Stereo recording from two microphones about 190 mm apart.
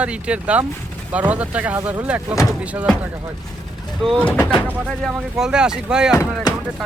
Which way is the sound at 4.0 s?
5° left (ahead or behind).